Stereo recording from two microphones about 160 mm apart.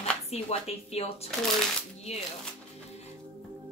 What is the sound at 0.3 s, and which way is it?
A woman's voice, 40° left (ahead or behind).